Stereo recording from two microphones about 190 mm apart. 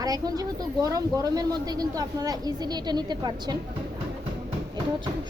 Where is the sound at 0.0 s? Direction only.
20° right (ahead or behind).